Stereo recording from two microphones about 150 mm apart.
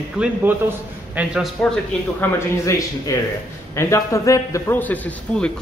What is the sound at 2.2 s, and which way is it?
A man's voice, 20° left (ahead or behind).